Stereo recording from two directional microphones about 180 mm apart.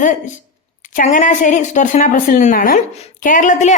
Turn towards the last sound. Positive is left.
turn(degrees=45)  # may be behind; listen again after turning